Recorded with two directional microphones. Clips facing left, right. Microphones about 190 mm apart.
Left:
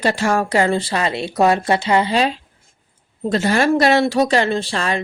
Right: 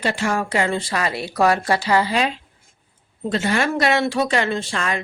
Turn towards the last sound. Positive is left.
turn(degrees=30)  # may be behind; listen again after turning